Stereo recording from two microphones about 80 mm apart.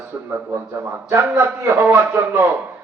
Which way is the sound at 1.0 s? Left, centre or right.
Right.